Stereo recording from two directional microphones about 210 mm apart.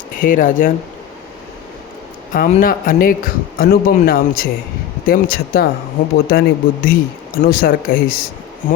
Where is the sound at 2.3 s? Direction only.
40° left (ahead or behind).